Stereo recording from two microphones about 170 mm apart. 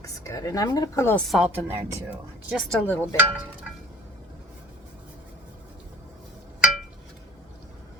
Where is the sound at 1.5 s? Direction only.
15° right (ahead or behind).